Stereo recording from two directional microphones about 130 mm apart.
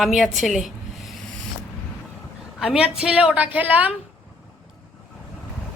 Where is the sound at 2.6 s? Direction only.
5° right (ahead or behind).